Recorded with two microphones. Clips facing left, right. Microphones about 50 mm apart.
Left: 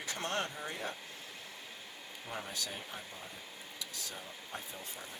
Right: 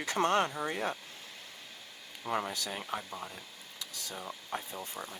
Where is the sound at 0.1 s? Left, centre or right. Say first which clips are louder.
Right 9 dB; right.